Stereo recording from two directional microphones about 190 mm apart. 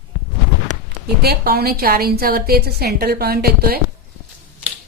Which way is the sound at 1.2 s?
55° right (ahead or behind).